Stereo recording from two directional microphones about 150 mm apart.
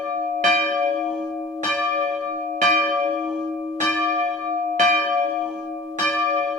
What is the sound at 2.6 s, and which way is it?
Church bell, 55° right (ahead or behind).